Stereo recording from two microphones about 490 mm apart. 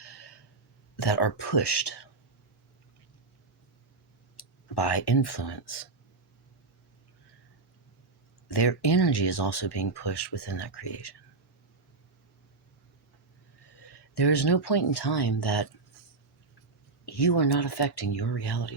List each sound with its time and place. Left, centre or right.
0.0 s a sound: left
0.9 s speech: left
4.4 s speech: left
8.4 s speech: left
13.7 s speech: left
17.1 s speech: left